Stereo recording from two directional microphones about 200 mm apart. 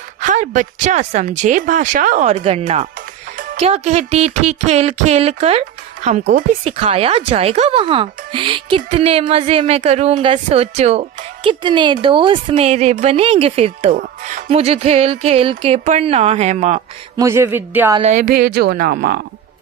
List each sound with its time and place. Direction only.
0.2 s speech: 40° right (ahead or behind)
17.2 s speech: 15° right (ahead or behind)
17.9 s a woman's voice: 35° right (ahead or behind)